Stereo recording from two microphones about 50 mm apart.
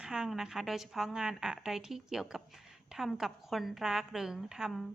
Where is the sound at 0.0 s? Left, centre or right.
Centre.